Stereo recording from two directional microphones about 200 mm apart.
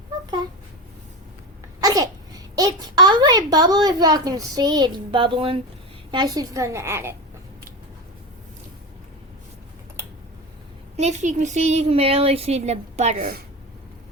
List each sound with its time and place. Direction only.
1.8 s a child's voice: 20° right (ahead or behind)
10.9 s a woman's voice: 35° right (ahead or behind)